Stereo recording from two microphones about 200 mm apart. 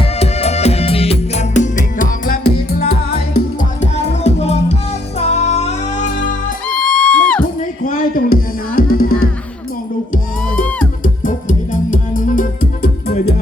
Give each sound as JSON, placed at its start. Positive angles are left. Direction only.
{"t": 0.0, "sound": "music", "side_deg": 30}
{"t": 3.8, "sound": "music", "side_deg": 35}
{"t": 6.7, "sound": "music", "side_deg": 5}
{"t": 7.9, "sound": "music", "side_deg": 45}
{"t": 11.0, "sound": "music", "side_deg": 40}